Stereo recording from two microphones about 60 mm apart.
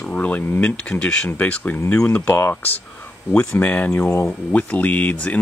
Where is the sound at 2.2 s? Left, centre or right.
Left.